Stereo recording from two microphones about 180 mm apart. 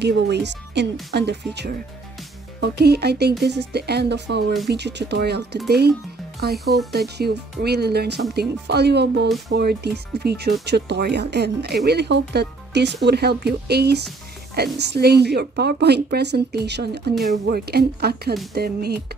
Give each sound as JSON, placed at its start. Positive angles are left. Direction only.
{"t": 0.0, "sound": "speech", "side_deg": -70}